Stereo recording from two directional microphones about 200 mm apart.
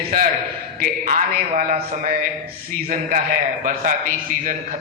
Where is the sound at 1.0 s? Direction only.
35° right (ahead or behind).